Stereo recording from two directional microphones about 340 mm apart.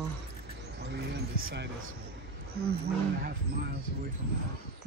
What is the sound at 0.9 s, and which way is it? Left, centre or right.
Speech, right.